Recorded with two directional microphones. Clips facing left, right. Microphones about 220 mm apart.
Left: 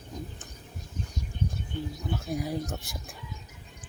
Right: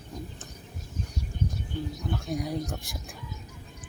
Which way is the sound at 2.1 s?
5° left (ahead or behind).